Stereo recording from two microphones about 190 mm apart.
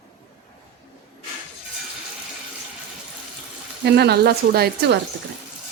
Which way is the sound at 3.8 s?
60° right (ahead or behind).